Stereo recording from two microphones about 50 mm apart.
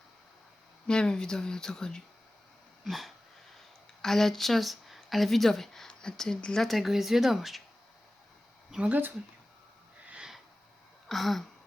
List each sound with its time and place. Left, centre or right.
0.9 s speech: centre
2.8 s speech: centre
6.6 s speech: centre
8.9 s speech: right
11.1 s speech: centre